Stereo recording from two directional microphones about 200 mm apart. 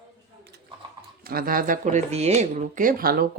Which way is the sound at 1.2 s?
45° right (ahead or behind).